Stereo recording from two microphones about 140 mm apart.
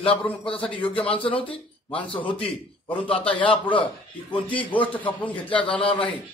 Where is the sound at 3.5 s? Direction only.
35° left (ahead or behind).